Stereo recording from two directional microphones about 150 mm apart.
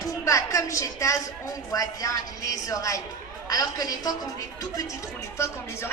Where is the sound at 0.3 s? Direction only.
20° left (ahead or behind).